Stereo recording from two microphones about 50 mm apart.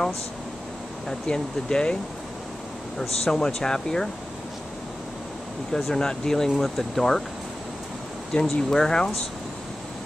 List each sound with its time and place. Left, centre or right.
1.2 s speech: centre
3.0 s speech: centre
5.7 s speech: centre
8.3 s speech: centre